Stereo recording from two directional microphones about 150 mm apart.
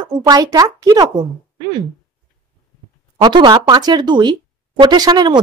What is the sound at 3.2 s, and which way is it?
A woman's voice, 30° right (ahead or behind).